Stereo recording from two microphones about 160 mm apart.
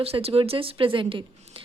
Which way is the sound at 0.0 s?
40° right (ahead or behind).